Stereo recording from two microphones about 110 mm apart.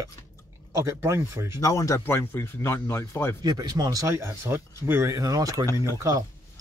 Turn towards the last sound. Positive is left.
turn(degrees=-30)  # may be behind; listen again after turning